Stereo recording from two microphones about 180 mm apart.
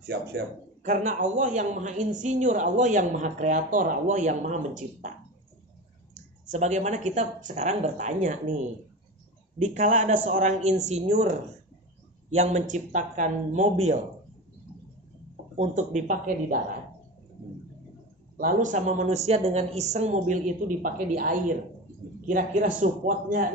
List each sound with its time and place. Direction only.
0.0 s speech: 65° right (ahead or behind)
0.8 s a woman's voice: 45° right (ahead or behind)
6.4 s speech: 40° right (ahead or behind)
9.6 s speech: 40° right (ahead or behind)
15.5 s a woman's voice: 40° right (ahead or behind)
18.4 s a woman's voice: 45° right (ahead or behind)